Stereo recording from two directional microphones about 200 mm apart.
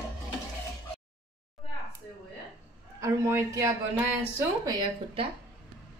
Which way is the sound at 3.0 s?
15° right (ahead or behind).